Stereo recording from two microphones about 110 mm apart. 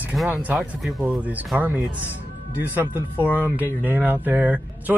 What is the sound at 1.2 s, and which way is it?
Speech, 15° right (ahead or behind).